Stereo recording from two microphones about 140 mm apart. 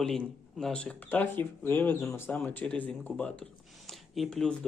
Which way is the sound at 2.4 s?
10° left (ahead or behind).